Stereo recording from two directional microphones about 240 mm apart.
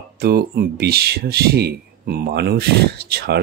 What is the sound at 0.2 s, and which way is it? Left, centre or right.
Speech, right.